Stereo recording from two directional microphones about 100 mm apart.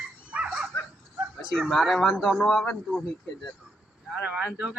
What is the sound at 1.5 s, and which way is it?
Speech, 5° left (ahead or behind).